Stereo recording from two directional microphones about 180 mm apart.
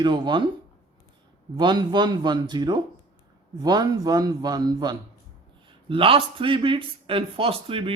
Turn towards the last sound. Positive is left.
turn(degrees=-30)  # may be behind; listen again after turning